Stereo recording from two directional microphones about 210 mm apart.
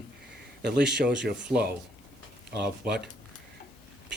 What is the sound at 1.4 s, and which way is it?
Speech, 5° right (ahead or behind).